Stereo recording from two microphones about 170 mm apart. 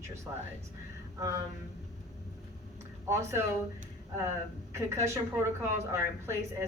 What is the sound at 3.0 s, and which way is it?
Speech, 15° right (ahead or behind).